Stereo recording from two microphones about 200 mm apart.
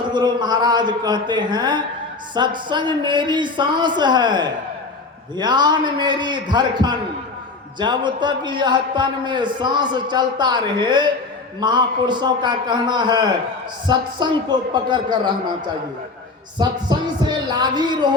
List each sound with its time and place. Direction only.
0.1 s a man's voice: 20° right (ahead or behind)
16.6 s a man's voice: 20° right (ahead or behind)